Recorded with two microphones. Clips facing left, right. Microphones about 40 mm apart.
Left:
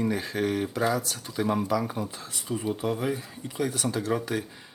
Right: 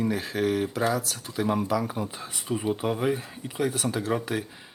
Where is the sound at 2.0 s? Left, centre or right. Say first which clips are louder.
Right 2 dB; centre.